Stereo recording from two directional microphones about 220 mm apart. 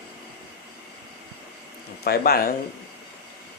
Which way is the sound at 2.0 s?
45° left (ahead or behind).